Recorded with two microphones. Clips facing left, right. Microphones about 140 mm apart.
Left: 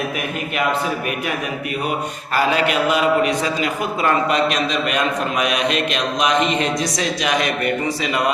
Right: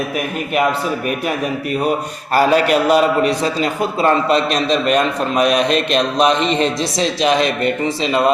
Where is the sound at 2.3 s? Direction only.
40° right (ahead or behind).